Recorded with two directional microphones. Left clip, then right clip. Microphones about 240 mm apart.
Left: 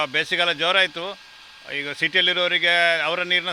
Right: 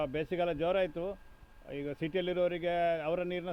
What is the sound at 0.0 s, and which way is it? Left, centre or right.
Speech, centre.